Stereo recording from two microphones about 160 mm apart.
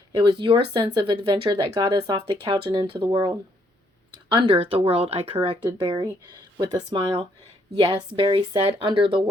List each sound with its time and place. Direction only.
0.2 s speech: 30° right (ahead or behind)